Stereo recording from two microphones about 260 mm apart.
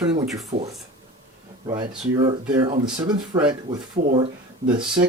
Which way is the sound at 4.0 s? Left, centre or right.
Right.